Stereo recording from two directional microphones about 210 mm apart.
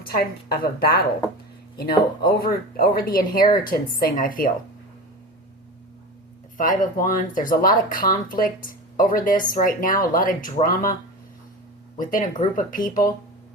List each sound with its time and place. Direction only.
0.0 s a woman's voice: 45° left (ahead or behind)
2.4 s a woman's voice: 45° left (ahead or behind)
6.6 s speech: 40° left (ahead or behind)
11.9 s a woman's voice: 40° left (ahead or behind)